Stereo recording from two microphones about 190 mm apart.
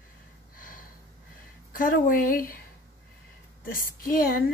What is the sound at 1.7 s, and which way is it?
Speech, 45° left (ahead or behind).